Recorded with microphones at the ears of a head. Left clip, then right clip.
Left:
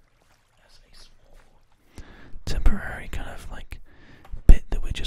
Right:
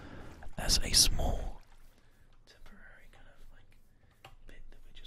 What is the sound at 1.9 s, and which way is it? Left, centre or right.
Whispering, left.